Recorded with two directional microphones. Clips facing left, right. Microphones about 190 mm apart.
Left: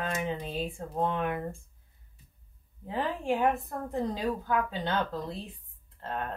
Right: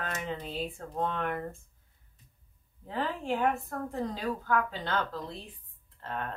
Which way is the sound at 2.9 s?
15° left (ahead or behind).